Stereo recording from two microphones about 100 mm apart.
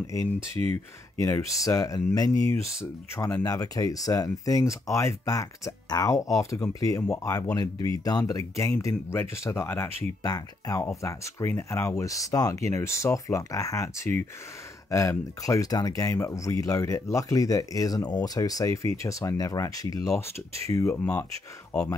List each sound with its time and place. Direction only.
0.0 s speech: 30° left (ahead or behind)
10.2 s speech: 40° left (ahead or behind)
10.8 s speech: 30° left (ahead or behind)